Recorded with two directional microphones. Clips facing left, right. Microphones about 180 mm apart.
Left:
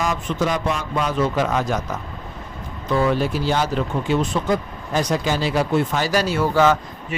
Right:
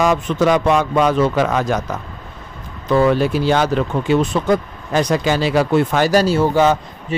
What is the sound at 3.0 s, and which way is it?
A man's voice, 65° right (ahead or behind).